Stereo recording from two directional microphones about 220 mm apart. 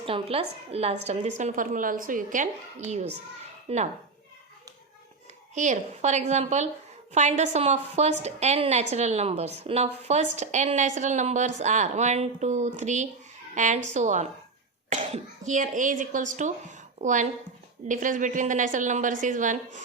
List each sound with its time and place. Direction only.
0.0 s a woman's voice: 25° right (ahead or behind)
5.5 s a woman's voice: 35° right (ahead or behind)